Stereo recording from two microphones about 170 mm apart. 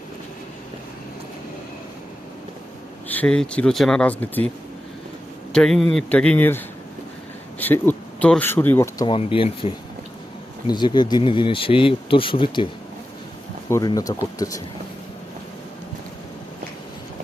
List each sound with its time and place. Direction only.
3.1 s speech: 5° left (ahead or behind)
5.5 s speech: 5° left (ahead or behind)
7.6 s speech: 10° left (ahead or behind)
9.0 s speech: 30° left (ahead or behind)
13.7 s speech: 20° left (ahead or behind)